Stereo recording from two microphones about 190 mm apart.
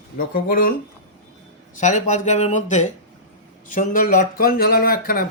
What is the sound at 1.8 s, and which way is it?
Speech, 40° left (ahead or behind).